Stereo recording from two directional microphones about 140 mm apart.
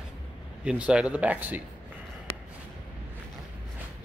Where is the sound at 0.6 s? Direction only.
5° right (ahead or behind).